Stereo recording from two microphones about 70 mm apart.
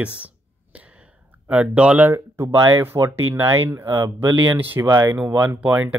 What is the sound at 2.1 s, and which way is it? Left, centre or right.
Speech, right.